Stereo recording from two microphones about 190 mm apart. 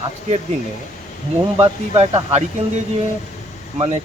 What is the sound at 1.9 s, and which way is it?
Speech, 30° right (ahead or behind).